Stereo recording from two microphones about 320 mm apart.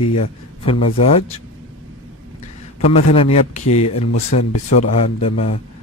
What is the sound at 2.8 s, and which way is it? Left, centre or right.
Speech, centre.